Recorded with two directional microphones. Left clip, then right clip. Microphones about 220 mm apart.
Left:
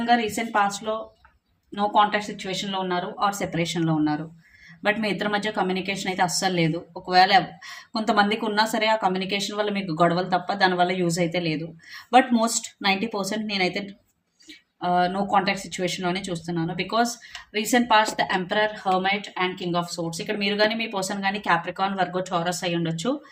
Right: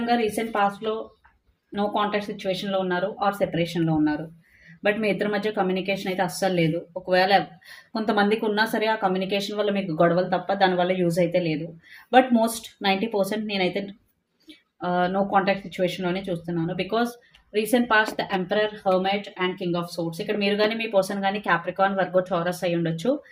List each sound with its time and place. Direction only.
0.0 s speech: 25° left (ahead or behind)
1.7 s speech: 25° left (ahead or behind)
12.8 s speech: 20° left (ahead or behind)